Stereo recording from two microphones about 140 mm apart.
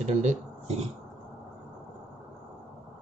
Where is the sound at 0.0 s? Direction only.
55° right (ahead or behind).